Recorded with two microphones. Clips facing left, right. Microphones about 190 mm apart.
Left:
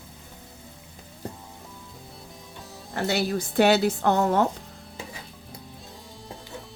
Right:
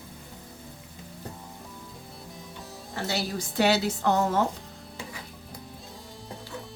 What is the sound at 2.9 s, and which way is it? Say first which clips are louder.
Speech: left 5 dB; 60° left (ahead or behind).